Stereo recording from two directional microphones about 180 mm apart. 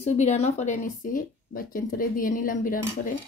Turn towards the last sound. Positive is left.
turn(degrees=50)  # may be behind; listen again after turning